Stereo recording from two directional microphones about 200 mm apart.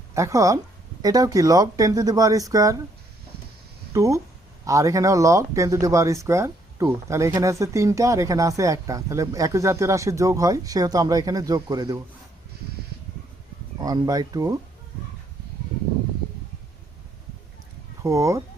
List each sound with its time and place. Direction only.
0.1 s speech: 15° right (ahead or behind)
3.9 s speech: 15° right (ahead or behind)
13.8 s speech: 20° right (ahead or behind)
18.0 s speech: 15° right (ahead or behind)